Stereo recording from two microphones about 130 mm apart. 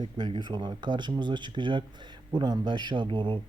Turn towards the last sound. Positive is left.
turn(degrees=-40)  # may be behind; listen again after turning